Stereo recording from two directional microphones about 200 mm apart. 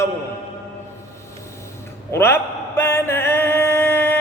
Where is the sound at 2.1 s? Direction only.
10° left (ahead or behind).